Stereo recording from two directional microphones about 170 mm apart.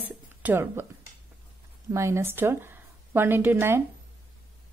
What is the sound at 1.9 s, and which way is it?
Speech, 15° right (ahead or behind).